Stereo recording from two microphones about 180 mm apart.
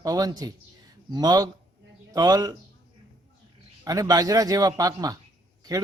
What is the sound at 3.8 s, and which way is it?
A man's voice, 20° right (ahead or behind).